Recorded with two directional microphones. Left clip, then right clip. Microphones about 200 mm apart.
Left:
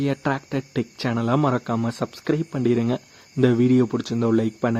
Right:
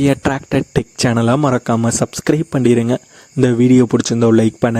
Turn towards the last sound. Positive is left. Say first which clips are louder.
# right 9 dB
turn(degrees=-45)  # may be behind; listen again after turning